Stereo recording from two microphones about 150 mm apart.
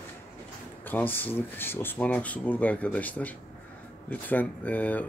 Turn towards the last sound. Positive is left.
turn(degrees=10)  # may be behind; listen again after turning